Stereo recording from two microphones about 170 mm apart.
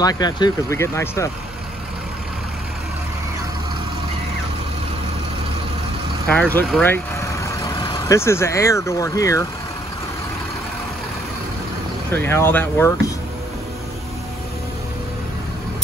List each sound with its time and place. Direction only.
0.0 s speech: 25° left (ahead or behind)
6.3 s speech: 10° left (ahead or behind)
12.2 s speech: 15° left (ahead or behind)